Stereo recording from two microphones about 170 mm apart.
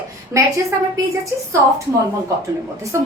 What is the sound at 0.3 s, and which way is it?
Speech, 15° right (ahead or behind).